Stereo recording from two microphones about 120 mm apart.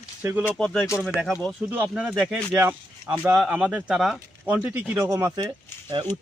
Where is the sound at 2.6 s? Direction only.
20° right (ahead or behind).